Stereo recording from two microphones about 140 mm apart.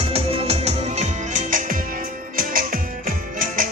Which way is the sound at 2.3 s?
90° right.